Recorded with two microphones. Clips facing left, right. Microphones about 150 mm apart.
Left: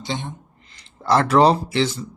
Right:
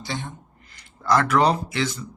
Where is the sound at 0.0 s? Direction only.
20° left (ahead or behind).